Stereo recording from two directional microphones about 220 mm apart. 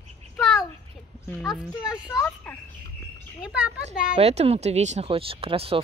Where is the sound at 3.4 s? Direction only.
5° right (ahead or behind).